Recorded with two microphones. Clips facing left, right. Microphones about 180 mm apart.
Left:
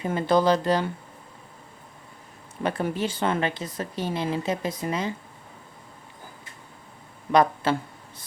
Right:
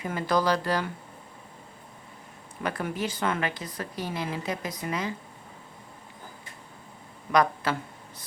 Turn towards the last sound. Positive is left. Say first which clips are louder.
# left 3 dB
turn(degrees=25)  # may be behind; listen again after turning